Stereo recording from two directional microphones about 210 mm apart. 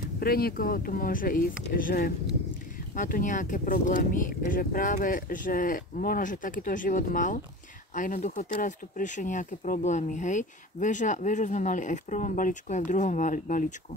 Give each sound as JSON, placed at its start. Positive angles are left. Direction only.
{"t": 0.2, "sound": "speech", "side_deg": 45}